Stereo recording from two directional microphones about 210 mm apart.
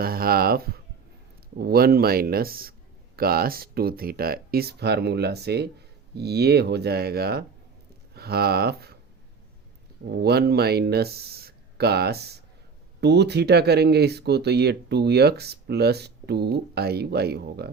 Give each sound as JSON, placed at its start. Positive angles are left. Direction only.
{"t": 0.0, "sound": "speech", "side_deg": -45}
{"t": 10.1, "sound": "speech", "side_deg": -50}